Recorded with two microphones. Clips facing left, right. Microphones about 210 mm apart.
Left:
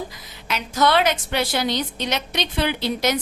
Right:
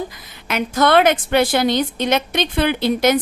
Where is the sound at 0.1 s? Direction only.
55° right (ahead or behind).